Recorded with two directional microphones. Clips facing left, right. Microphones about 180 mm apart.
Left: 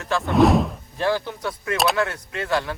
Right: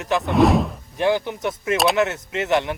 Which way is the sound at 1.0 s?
20° right (ahead or behind).